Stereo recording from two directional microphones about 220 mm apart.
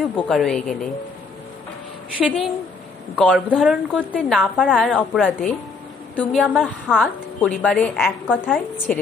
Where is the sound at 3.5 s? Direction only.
5° right (ahead or behind).